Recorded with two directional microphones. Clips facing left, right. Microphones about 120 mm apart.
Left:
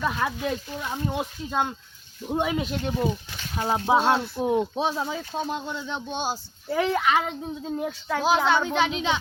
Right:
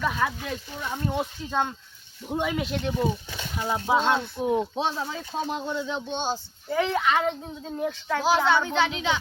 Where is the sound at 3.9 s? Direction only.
20° left (ahead or behind).